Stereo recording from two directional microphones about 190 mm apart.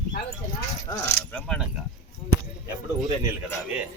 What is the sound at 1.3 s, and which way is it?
Speech, 5° left (ahead or behind).